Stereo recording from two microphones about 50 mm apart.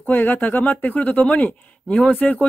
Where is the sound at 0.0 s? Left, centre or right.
Left.